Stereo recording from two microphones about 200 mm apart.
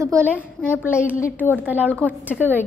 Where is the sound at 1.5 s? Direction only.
10° right (ahead or behind).